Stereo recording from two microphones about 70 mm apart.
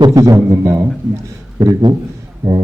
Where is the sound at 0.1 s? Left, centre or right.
Right.